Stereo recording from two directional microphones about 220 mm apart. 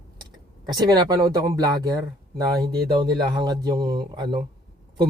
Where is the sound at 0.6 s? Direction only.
20° right (ahead or behind).